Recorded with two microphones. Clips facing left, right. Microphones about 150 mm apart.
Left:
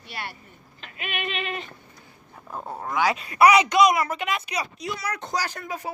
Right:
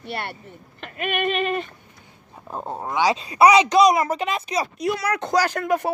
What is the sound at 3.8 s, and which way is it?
Speech, 35° right (ahead or behind).